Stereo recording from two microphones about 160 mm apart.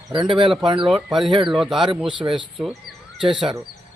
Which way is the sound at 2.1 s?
30° right (ahead or behind).